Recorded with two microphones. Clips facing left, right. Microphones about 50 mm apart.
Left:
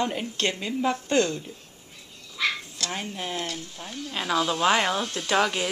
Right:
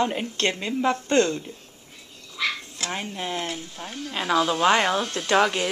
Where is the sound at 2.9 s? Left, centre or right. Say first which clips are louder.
Right 3 dB; centre.